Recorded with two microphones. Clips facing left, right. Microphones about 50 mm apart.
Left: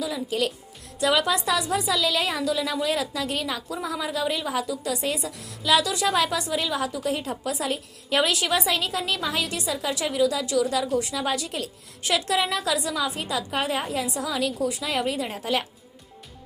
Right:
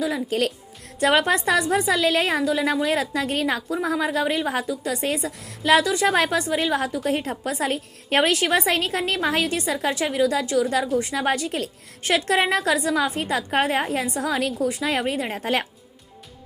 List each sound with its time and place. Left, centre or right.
0.0 s a woman's voice: right